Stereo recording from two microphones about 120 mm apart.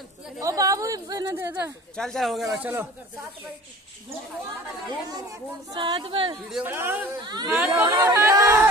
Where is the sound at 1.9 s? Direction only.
5° left (ahead or behind).